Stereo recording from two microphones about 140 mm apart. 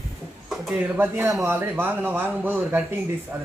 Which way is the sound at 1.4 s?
15° right (ahead or behind).